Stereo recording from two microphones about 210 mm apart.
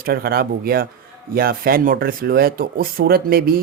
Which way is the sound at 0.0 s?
45° right (ahead or behind).